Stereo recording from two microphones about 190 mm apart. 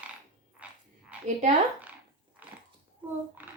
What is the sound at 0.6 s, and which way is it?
Frog, 5° right (ahead or behind).